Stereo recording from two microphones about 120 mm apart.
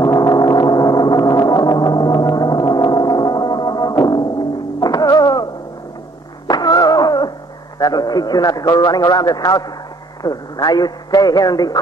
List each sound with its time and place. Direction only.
0.0 s gong: 30° left (ahead or behind)
4.7 s music: 30° left (ahead or behind)
6.4 s a sound: 35° left (ahead or behind)
7.8 s a man's voice: 35° left (ahead or behind)